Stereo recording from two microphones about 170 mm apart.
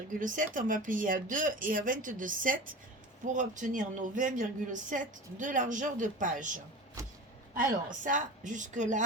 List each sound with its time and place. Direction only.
0.1 s a woman's voice: 50° right (ahead or behind)
8.0 s a woman's voice: 50° right (ahead or behind)